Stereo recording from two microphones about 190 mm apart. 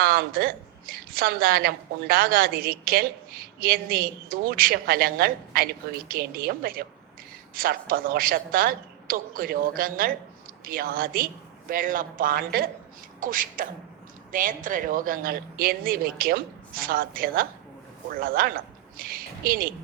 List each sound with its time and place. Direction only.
0.0 s a woman's voice: 50° right (ahead or behind)